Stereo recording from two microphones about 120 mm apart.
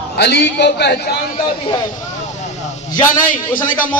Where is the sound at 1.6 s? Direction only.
40° left (ahead or behind).